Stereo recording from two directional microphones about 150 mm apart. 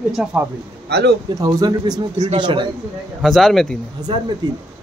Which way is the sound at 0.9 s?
90° right.